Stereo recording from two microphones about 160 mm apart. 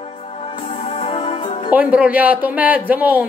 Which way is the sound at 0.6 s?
35° left (ahead or behind).